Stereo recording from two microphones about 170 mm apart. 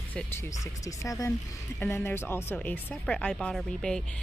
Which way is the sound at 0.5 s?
20° left (ahead or behind).